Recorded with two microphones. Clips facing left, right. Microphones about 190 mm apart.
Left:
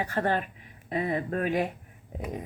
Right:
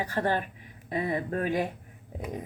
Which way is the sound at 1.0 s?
30° left (ahead or behind).